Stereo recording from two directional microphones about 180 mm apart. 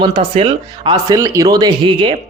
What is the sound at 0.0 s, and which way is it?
Speech, 25° right (ahead or behind).